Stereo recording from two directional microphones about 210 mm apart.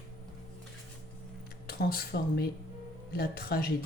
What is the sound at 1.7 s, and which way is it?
Speech, 50° left (ahead or behind).